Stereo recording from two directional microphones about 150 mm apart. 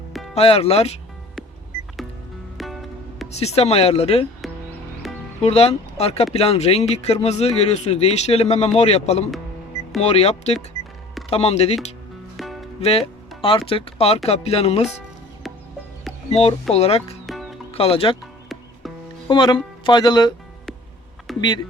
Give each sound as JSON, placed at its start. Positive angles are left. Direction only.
{"t": 0.3, "sound": "speech", "side_deg": 40}
{"t": 2.6, "sound": "music", "side_deg": 0}
{"t": 3.3, "sound": "speech", "side_deg": 45}
{"t": 5.0, "sound": "music", "side_deg": 0}
{"t": 5.4, "sound": "speech", "side_deg": 45}
{"t": 12.4, "sound": "music", "side_deg": 0}
{"t": 12.8, "sound": "speech", "side_deg": 40}
{"t": 16.3, "sound": "speech", "side_deg": 45}
{"t": 19.3, "sound": "speech", "side_deg": 30}
{"t": 21.3, "sound": "speech", "side_deg": 0}